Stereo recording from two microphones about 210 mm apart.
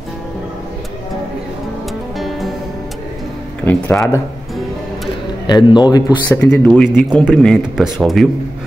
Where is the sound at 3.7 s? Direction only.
10° left (ahead or behind).